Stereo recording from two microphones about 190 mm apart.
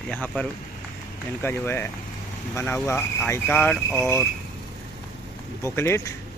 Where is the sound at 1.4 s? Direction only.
10° left (ahead or behind).